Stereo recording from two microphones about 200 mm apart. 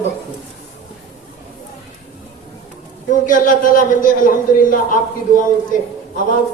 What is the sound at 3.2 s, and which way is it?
A man's voice, 40° left (ahead or behind).